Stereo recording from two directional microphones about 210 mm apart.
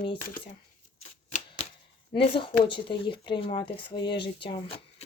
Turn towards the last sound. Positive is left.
turn(degrees=25)  # may be behind; listen again after turning